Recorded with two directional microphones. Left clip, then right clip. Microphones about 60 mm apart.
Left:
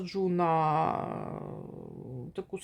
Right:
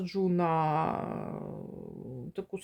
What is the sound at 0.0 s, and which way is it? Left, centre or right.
Speech, centre.